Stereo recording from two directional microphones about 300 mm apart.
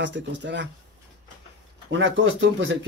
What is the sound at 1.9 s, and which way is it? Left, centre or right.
Speech, right.